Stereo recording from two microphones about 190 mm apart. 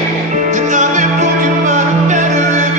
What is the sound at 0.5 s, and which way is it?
Music, 40° right (ahead or behind).